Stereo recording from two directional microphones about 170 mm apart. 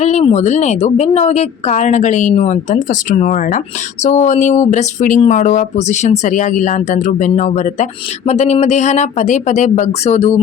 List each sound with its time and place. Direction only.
0.0 s speech: 40° left (ahead or behind)